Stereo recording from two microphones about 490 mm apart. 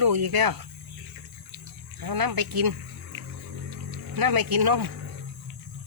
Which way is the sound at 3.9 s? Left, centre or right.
Right.